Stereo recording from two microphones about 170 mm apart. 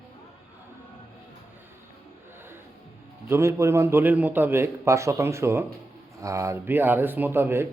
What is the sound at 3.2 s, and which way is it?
Speech, 15° right (ahead or behind).